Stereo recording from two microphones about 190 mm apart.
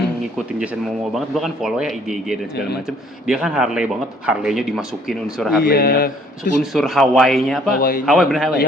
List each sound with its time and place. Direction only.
1.1 s speech: centre (ahead or behind)
5.6 s speech: 50° left (ahead or behind)
6.7 s speech: centre (ahead or behind)
7.8 s speech: 50° left (ahead or behind)
8.0 s speech: centre (ahead or behind)